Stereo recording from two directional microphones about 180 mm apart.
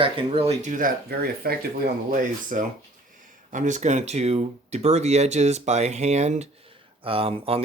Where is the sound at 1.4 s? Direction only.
60° right (ahead or behind).